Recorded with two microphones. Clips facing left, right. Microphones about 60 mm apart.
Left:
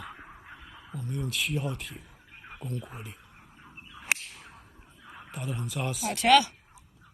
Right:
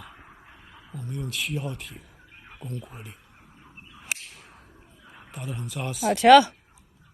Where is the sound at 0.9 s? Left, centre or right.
Centre.